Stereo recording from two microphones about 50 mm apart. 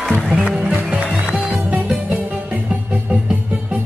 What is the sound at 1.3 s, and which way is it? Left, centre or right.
Music, centre.